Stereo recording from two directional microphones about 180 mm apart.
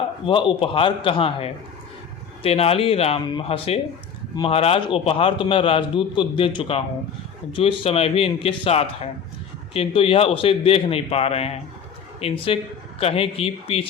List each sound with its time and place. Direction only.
0.3 s a man's voice: 30° left (ahead or behind)